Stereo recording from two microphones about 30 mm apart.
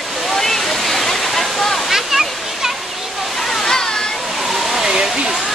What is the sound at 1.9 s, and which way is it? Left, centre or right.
Waterfall, centre.